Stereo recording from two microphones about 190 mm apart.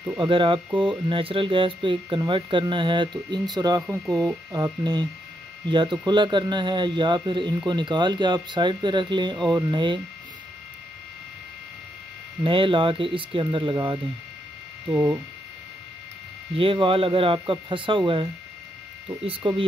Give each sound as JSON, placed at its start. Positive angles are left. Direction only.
{"t": 0.2, "sound": "speech", "side_deg": -25}
{"t": 4.0, "sound": "speech", "side_deg": 5}
{"t": 4.3, "sound": "speech", "side_deg": -20}
{"t": 12.4, "sound": "speech", "side_deg": -25}
{"t": 16.5, "sound": "speech", "side_deg": -30}